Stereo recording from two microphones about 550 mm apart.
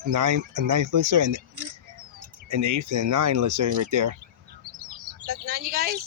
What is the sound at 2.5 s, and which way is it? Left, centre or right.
Speech, right.